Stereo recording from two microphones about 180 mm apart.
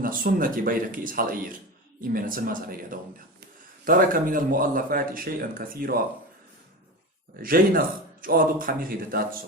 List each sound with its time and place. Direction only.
0.0 s speech: 50° right (ahead or behind)
7.4 s speech: 55° right (ahead or behind)